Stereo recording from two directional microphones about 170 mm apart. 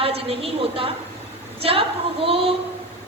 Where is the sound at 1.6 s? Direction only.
35° right (ahead or behind).